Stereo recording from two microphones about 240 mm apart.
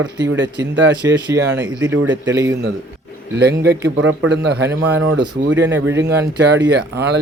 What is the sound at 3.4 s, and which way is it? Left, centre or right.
Speech, right.